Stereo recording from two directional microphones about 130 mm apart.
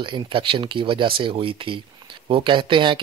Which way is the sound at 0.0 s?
40° right (ahead or behind).